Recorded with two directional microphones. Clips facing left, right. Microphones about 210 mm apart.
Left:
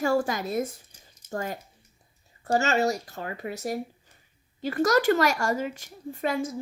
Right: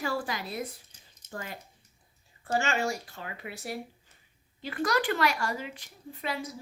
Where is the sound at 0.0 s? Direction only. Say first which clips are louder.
Left 8 dB; 45° left (ahead or behind).